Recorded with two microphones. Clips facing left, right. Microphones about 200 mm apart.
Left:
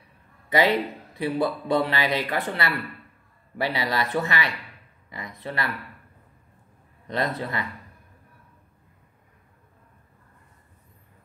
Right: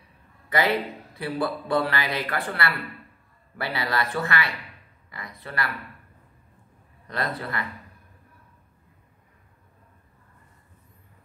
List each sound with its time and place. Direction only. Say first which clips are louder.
0.5 s speech: left 3 dB; 20° left (ahead or behind)
7.1 s speech: left 3 dB; 20° left (ahead or behind)